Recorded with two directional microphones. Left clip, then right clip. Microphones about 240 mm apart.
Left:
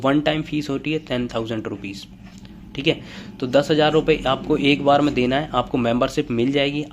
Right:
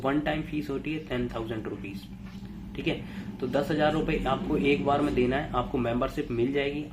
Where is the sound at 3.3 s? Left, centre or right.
Left.